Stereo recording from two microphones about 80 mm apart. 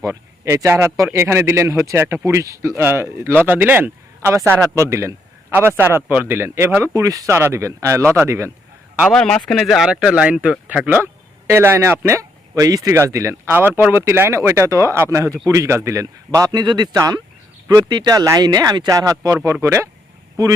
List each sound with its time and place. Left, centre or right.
0.0 s speech: right
4.8 s speech: right
6.9 s speech: right
9.1 s speech: centre
10.8 s speech: right
13.5 s speech: right
16.9 s speech: right
17.7 s speech: right
19.6 s speech: right